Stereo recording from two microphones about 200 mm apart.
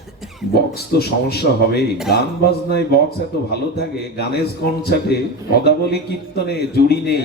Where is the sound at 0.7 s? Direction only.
55° left (ahead or behind).